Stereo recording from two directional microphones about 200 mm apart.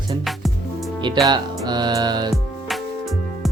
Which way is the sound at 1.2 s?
20° right (ahead or behind).